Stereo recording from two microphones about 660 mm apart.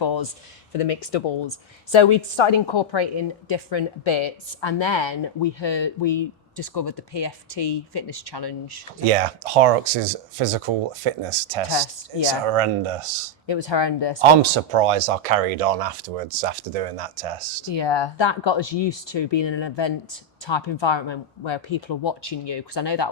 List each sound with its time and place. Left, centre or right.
0.0 s speech: left
0.7 s speech: left
1.5 s a woman's voice: left
9.1 s speech: right
11.7 s a woman's voice: left
12.5 s speech: right
13.5 s a woman's voice: left
14.2 s speech: right
17.7 s a woman's voice: left